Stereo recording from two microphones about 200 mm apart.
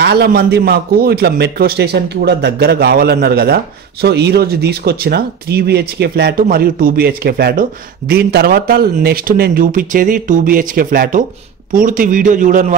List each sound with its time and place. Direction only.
0.0 s a man's voice: 55° right (ahead or behind)